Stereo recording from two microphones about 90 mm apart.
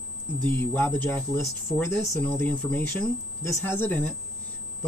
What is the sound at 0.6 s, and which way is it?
Speech, 25° left (ahead or behind).